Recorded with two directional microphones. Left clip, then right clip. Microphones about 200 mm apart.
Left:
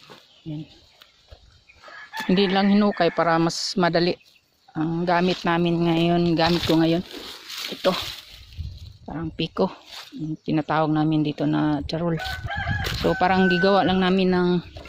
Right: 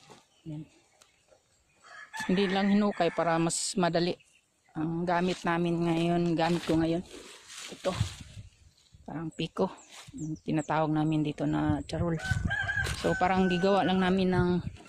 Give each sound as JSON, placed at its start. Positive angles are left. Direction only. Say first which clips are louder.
{"t": 2.2, "sound": "speech", "louder": "left 8 dB", "side_deg": 5}
{"t": 6.5, "sound": "speech", "louder": "left 8 dB", "side_deg": 40}
{"t": 6.8, "sound": "speech", "louder": "left 8 dB", "side_deg": 15}
{"t": 7.5, "sound": "dog", "louder": "left 10 dB", "side_deg": 45}
{"t": 9.0, "sound": "speech", "louder": "left 7 dB", "side_deg": 0}
{"t": 12.8, "sound": "chicken", "louder": "left 7 dB", "side_deg": 20}
{"t": 13.1, "sound": "speech", "louder": "left 8 dB", "side_deg": 0}